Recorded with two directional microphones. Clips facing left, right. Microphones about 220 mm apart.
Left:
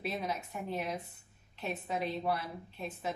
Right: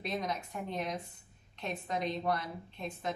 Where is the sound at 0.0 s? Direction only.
5° left (ahead or behind).